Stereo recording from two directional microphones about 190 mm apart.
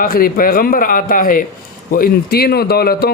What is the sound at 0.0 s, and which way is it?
A woman's voice, 50° left (ahead or behind).